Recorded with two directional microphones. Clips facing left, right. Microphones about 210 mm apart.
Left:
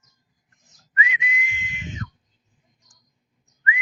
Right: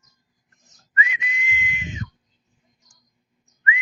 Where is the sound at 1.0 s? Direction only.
40° right (ahead or behind).